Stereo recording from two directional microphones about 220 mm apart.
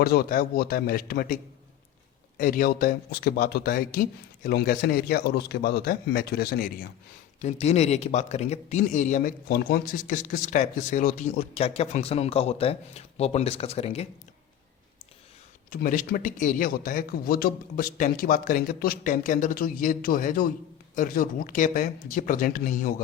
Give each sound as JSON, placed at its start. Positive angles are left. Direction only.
{"t": 0.0, "sound": "a man's voice", "side_deg": 45}
{"t": 2.4, "sound": "a man's voice", "side_deg": 40}
{"t": 7.4, "sound": "a man's voice", "side_deg": 30}
{"t": 15.7, "sound": "speech", "side_deg": 40}